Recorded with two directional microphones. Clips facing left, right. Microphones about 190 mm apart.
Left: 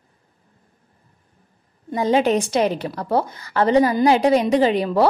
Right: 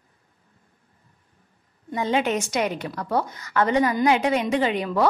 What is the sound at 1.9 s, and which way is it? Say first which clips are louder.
A woman's voice: left 5 dB; 35° left (ahead or behind).